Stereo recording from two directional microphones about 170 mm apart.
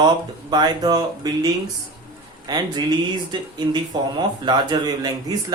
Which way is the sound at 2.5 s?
25° right (ahead or behind).